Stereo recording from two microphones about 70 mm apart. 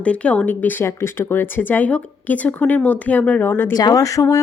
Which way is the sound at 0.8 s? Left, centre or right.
Left.